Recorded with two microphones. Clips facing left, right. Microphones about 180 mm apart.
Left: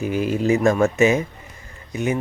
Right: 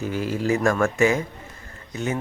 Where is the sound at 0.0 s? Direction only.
15° left (ahead or behind).